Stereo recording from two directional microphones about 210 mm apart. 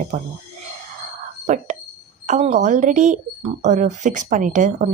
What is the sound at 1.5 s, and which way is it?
Speech, 35° right (ahead or behind).